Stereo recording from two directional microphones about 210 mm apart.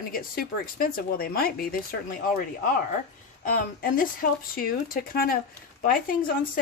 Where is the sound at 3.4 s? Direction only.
40° left (ahead or behind).